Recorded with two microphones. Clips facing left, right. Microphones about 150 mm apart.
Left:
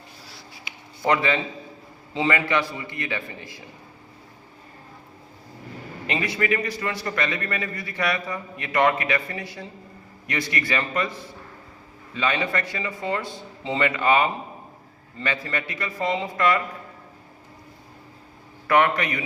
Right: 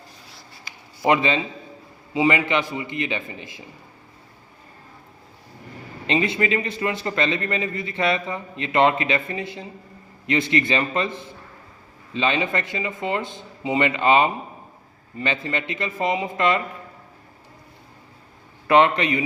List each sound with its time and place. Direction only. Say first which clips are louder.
1.0 s a man's voice: right 2 dB; 20° right (ahead or behind)
6.1 s a man's voice: right 3 dB; 25° right (ahead or behind)
18.7 s a man's voice: right 3 dB; 25° right (ahead or behind)